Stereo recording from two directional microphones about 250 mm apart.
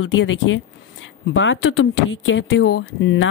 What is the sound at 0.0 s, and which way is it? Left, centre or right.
Speech, left.